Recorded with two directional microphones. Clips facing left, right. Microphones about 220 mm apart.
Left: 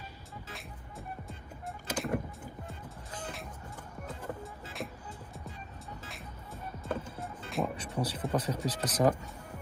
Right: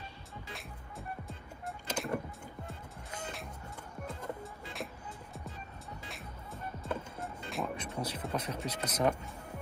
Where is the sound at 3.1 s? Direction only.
10° right (ahead or behind).